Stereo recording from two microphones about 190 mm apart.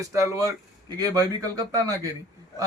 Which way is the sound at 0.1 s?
15° right (ahead or behind).